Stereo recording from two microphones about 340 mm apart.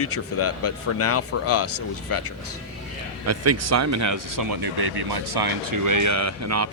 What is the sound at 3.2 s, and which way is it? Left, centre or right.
Speech, right.